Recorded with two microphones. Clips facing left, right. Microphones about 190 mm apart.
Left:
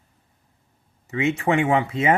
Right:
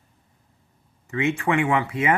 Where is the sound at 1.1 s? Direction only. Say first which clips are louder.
Left 1 dB; 20° left (ahead or behind).